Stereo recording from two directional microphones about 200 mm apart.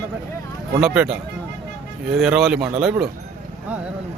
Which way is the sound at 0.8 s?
5° right (ahead or behind).